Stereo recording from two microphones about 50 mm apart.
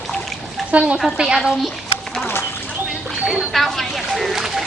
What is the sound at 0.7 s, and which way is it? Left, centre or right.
Speech, right.